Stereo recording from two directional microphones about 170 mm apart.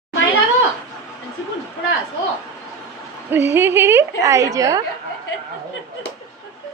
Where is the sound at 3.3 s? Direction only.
15° right (ahead or behind).